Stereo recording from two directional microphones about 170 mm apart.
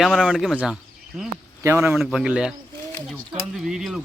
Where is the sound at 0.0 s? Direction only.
Centre (ahead or behind).